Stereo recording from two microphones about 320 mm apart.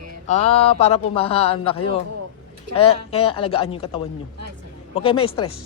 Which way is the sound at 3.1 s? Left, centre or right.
Centre.